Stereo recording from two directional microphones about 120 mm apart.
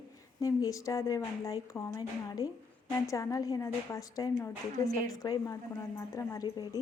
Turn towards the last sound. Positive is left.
turn(degrees=35)  # may be behind; listen again after turning